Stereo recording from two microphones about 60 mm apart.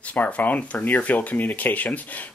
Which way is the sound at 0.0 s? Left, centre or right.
Left.